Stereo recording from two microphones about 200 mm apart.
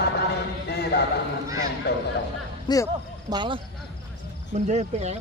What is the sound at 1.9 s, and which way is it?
Speech, 55° left (ahead or behind).